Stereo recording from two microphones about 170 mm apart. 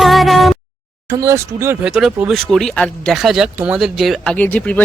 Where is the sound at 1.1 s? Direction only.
20° right (ahead or behind).